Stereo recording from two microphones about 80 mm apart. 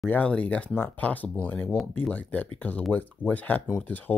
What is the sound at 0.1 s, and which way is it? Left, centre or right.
Speech, centre.